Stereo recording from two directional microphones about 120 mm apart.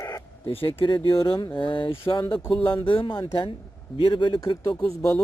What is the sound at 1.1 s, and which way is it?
Speech, 45° left (ahead or behind).